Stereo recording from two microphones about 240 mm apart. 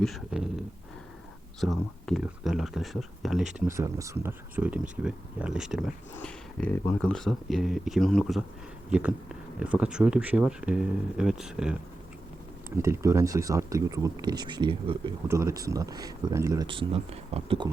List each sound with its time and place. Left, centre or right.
0.0 s speech: centre
1.6 s speech: centre; by 17.7 s right